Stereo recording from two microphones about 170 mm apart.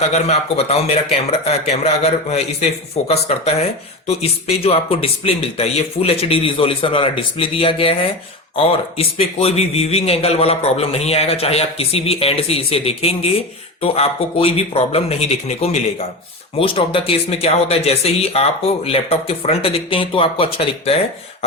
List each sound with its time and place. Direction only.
0.1 s speech: 40° left (ahead or behind)